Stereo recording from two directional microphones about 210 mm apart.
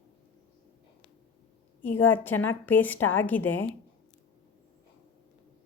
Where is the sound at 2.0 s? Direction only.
10° left (ahead or behind).